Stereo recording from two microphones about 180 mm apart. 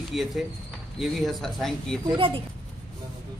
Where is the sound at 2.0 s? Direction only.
30° right (ahead or behind).